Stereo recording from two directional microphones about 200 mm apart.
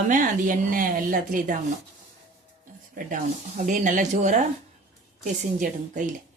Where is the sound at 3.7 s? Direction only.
40° right (ahead or behind).